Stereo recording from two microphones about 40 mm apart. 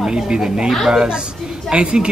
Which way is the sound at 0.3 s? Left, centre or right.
Centre.